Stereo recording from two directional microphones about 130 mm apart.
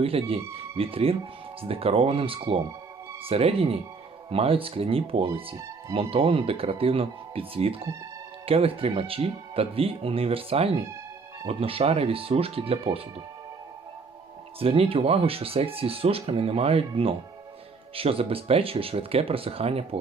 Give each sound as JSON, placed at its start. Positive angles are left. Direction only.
{"t": 0.0, "sound": "speech", "side_deg": -45}
{"t": 14.6, "sound": "speech", "side_deg": -45}